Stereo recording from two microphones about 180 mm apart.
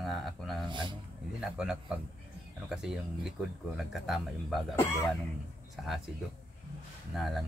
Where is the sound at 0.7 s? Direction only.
25° right (ahead or behind).